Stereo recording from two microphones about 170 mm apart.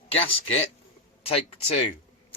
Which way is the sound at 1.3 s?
35° left (ahead or behind).